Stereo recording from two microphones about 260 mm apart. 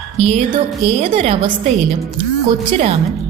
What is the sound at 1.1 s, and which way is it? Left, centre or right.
Speech, right.